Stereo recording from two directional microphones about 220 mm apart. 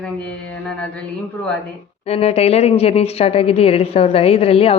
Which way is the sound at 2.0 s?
25° left (ahead or behind).